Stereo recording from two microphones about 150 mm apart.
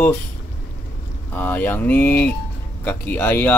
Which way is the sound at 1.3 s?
10° left (ahead or behind).